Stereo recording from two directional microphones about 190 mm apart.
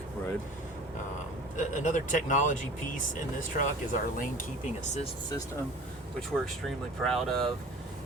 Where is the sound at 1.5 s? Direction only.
40° left (ahead or behind).